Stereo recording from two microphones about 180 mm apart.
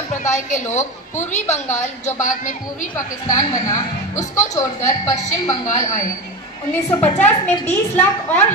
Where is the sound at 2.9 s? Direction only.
20° left (ahead or behind).